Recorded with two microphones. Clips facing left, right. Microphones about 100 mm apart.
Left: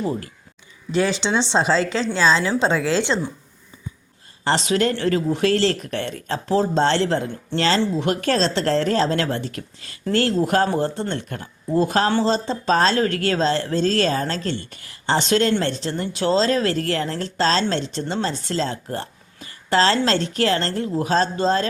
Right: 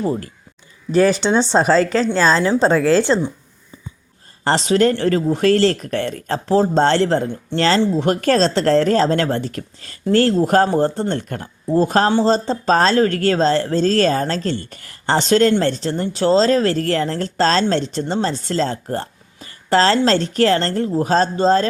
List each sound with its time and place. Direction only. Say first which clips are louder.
0.0 s speech: right 4 dB; 30° right (ahead or behind)
0.9 s speech: right 6 dB; 45° right (ahead or behind)
4.4 s speech: right 4 dB; 40° right (ahead or behind)